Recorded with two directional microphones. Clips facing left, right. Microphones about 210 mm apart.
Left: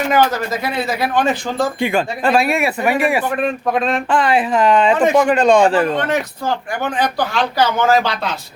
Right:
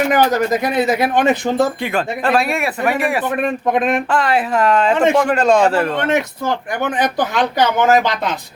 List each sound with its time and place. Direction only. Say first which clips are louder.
0.3 s speech: right 5 dB; 15° right (ahead or behind)
1.8 s speech: left 2 dB; centre (ahead or behind)
3.2 s speech: right 1 dB; 20° right (ahead or behind)
4.1 s speech: left 1 dB; centre (ahead or behind)
6.0 s speech: right 2 dB; 25° right (ahead or behind)